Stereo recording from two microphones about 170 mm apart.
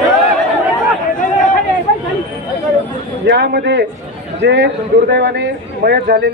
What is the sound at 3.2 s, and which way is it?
A man's voice, 85° right.